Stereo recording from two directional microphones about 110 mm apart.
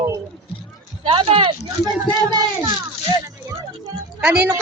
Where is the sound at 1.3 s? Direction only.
60° right (ahead or behind).